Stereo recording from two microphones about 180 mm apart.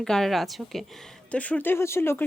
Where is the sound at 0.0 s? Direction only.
Centre (ahead or behind).